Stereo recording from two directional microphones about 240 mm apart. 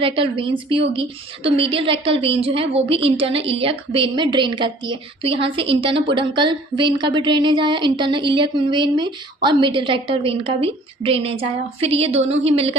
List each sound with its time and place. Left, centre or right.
0.0 s a woman's voice: right